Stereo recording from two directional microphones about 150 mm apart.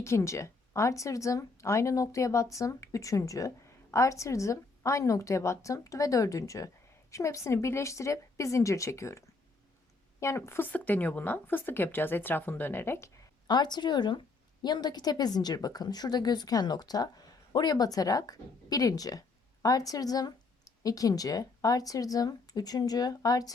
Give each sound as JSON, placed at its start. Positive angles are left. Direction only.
{"t": 0.0, "sound": "a woman's voice", "side_deg": 20}
{"t": 13.5, "sound": "a woman's voice", "side_deg": 30}